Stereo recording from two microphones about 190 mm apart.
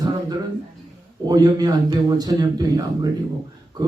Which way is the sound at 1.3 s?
20° right (ahead or behind).